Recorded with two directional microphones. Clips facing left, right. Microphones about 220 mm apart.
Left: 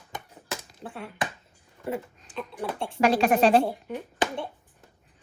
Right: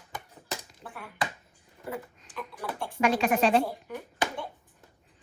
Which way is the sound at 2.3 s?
25° left (ahead or behind).